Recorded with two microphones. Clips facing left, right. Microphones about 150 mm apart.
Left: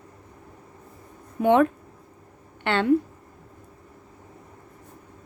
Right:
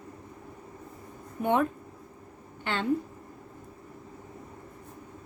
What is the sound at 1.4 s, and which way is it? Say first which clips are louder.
Speech: left 7 dB; 90° left.